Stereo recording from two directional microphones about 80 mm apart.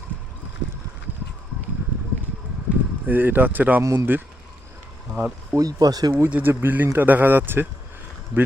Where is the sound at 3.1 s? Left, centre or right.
Right.